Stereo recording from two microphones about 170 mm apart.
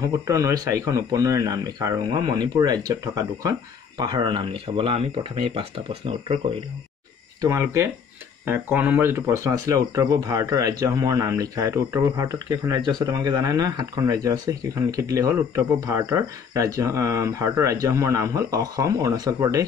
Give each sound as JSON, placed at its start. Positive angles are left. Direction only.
{"t": 0.3, "sound": "speech", "side_deg": -20}
{"t": 7.4, "sound": "speech", "side_deg": -20}